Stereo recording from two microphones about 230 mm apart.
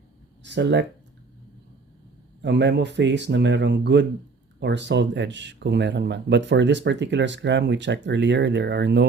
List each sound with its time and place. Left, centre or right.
0.4 s speech: right
2.4 s speech: right